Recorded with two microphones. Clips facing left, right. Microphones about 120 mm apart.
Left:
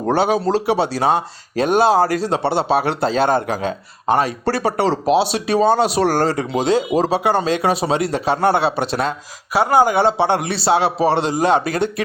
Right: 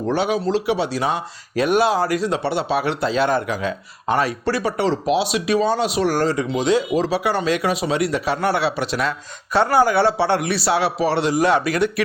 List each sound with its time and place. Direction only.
0.0 s speech: 40° left (ahead or behind)
4.5 s speech: 35° left (ahead or behind)
7.1 s a man's voice: 25° left (ahead or behind)